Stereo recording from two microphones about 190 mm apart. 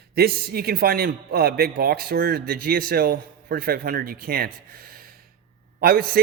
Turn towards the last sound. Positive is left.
turn(degrees=-55)  # may be behind; listen again after turning